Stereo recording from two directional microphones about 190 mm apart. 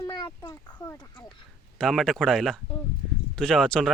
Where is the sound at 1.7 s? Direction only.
Centre (ahead or behind).